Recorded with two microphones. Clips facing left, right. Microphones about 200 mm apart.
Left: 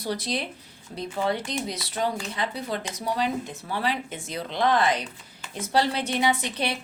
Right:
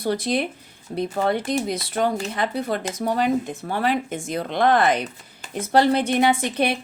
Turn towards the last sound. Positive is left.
turn(degrees=-55)  # may be behind; listen again after turning